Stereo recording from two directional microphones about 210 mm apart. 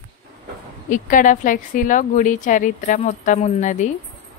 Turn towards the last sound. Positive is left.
turn(degrees=35)  # may be behind; listen again after turning